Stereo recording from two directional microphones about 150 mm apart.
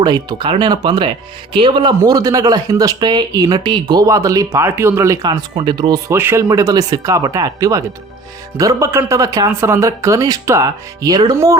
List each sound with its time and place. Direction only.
0.0 s speech: 30° right (ahead or behind)